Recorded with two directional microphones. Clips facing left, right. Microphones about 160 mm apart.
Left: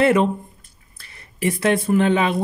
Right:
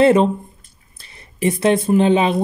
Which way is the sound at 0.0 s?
25° right (ahead or behind).